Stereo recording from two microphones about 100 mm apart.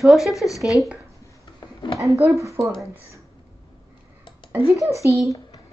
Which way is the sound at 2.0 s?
30° right (ahead or behind).